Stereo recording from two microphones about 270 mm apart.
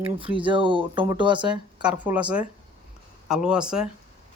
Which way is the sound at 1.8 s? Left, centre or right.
Centre.